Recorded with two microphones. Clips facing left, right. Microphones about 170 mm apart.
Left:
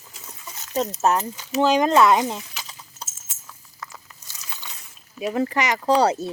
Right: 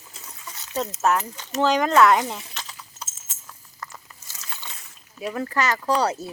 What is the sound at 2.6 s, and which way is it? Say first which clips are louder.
Clip-clop: even; 25° left (ahead or behind).